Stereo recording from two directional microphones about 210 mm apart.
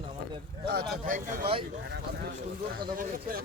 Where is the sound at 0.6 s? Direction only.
50° right (ahead or behind).